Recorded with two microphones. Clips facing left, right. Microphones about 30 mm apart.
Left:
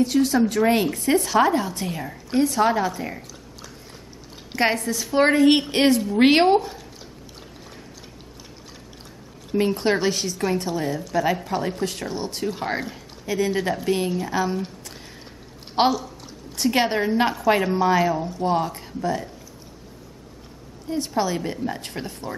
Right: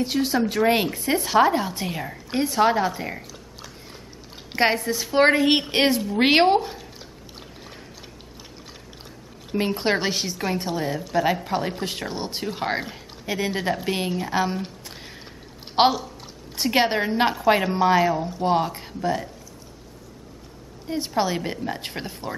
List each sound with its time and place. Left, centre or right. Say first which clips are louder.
0.0 s a woman's voice: left 3 dB; right
9.5 s a woman's voice: left 2 dB; centre
18.4 s speech: right 2 dB; right
20.9 s speech: even; right